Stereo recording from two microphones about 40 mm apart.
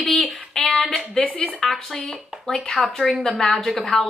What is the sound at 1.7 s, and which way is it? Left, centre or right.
Speech, centre.